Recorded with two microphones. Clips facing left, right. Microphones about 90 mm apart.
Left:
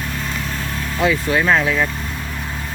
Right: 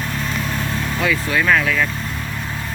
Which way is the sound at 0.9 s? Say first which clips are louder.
Left 3 dB; 20° left (ahead or behind).